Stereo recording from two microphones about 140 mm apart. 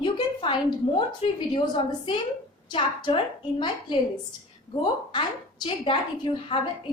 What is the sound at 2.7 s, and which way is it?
A woman's voice, 35° left (ahead or behind).